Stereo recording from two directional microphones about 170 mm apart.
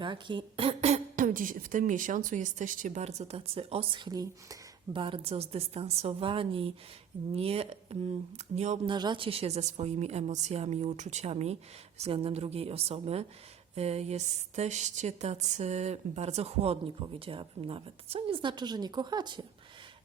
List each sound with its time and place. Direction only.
0.0 s speech: 30° right (ahead or behind)
8.9 s speech: 25° right (ahead or behind)